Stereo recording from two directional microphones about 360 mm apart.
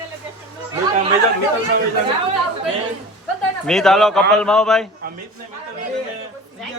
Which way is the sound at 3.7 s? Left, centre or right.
Centre.